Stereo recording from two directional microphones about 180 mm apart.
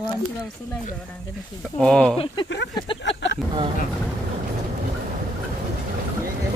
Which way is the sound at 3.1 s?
85° left.